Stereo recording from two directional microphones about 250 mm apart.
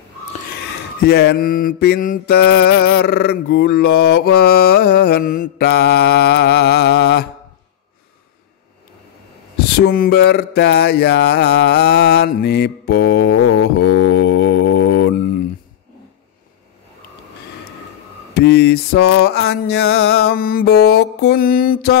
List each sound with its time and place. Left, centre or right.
0.5 s mantra: left
9.7 s mantra: left
18.3 s mantra: left